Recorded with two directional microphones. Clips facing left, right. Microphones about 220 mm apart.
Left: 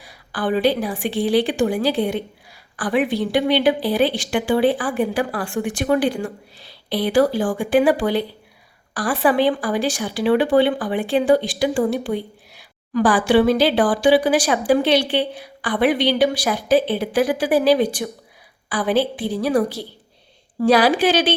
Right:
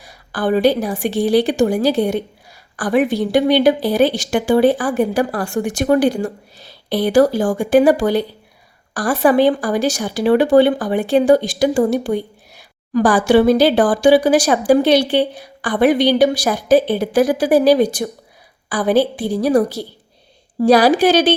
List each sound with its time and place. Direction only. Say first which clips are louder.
0.0 s a woman's voice: right 4 dB; 45° right (ahead or behind)